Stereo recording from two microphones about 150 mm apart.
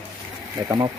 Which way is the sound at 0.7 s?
25° right (ahead or behind).